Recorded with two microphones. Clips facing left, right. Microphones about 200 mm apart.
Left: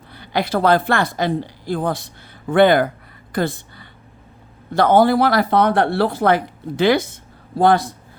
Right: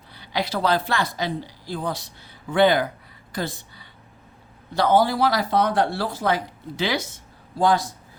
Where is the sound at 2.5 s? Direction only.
55° left (ahead or behind).